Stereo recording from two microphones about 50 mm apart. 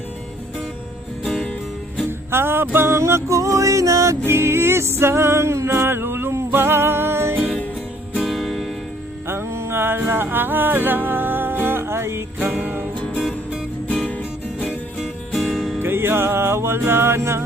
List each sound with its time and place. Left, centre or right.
2.0 s music: right
2.7 s a sound: right
3.0 s music: right
4.3 s music: right
8.2 s music: centre
9.2 s music: right
12.5 s music: right
13.1 s music: centre
14.9 s music: centre
15.8 s music: right